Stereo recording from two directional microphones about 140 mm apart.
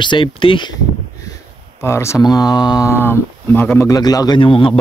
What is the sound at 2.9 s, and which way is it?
Speech, 15° left (ahead or behind).